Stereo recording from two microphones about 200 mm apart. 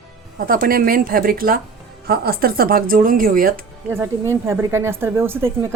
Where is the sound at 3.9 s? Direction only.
10° right (ahead or behind).